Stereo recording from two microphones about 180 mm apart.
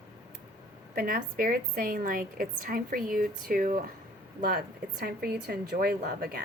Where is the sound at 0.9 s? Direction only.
55° right (ahead or behind).